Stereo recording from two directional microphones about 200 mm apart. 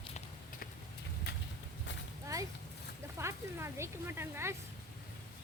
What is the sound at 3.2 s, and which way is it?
Speech, 15° right (ahead or behind).